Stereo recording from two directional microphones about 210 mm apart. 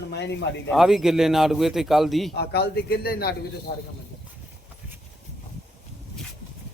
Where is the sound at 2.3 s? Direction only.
50° left (ahead or behind).